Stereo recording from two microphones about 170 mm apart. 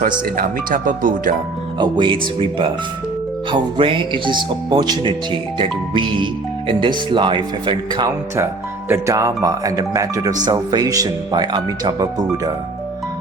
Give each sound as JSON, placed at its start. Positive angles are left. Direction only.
{"t": 0.0, "sound": "speech", "side_deg": -55}
{"t": 1.8, "sound": "speech", "side_deg": -30}